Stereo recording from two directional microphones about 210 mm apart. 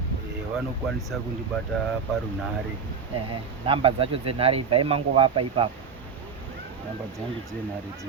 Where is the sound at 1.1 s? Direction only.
5° right (ahead or behind).